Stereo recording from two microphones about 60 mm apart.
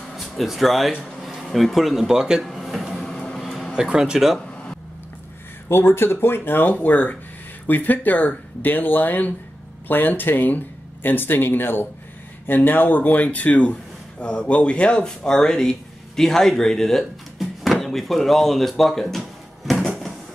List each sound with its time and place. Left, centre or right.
0.1 s speech: centre
2.4 s a sound: centre
3.1 s vehicle: centre
3.7 s speech: centre
5.7 s speech: left; by 19.8 s centre